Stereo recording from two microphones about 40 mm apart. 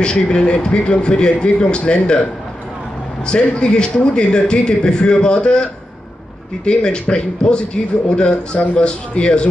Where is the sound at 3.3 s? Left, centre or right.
Left.